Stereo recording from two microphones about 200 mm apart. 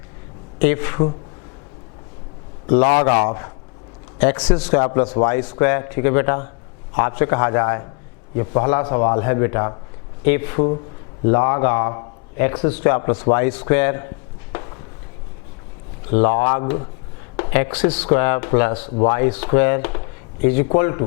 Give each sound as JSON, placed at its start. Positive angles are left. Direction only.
{"t": 0.6, "sound": "speech", "side_deg": 15}
{"t": 2.9, "sound": "a man's voice", "side_deg": 25}
{"t": 14.5, "sound": "walk", "side_deg": 20}
{"t": 16.2, "sound": "speech", "side_deg": 15}